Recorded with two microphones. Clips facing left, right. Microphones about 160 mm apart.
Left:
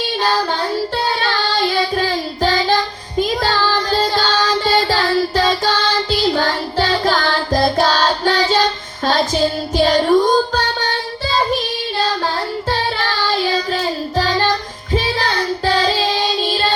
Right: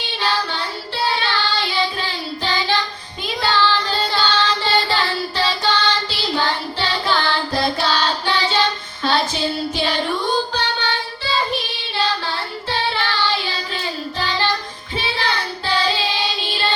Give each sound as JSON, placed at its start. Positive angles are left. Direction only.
{"t": 0.2, "sound": "child singing", "side_deg": 45}